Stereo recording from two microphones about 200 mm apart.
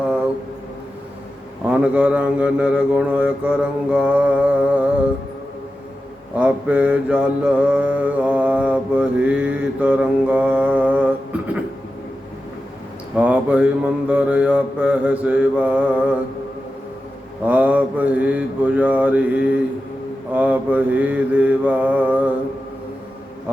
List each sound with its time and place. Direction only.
1.7 s mantra: 5° right (ahead or behind)
6.3 s mantra: 5° right (ahead or behind)
13.1 s mantra: 5° right (ahead or behind)
17.4 s mantra: 5° right (ahead or behind)